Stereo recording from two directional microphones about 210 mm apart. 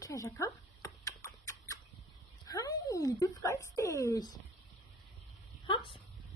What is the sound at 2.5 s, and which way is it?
Speech, 15° left (ahead or behind).